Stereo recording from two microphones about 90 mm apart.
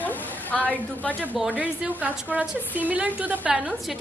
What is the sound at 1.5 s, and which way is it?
A woman's voice, 15° right (ahead or behind).